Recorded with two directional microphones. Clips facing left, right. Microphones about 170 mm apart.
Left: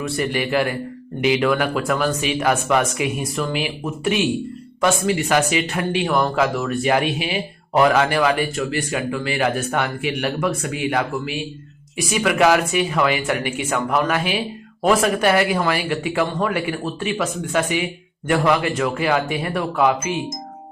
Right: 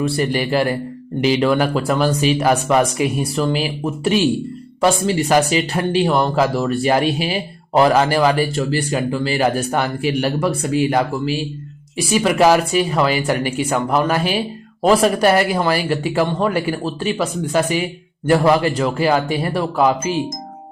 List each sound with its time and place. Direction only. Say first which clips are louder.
0.0 s speech: right 4 dB; 35° right (ahead or behind)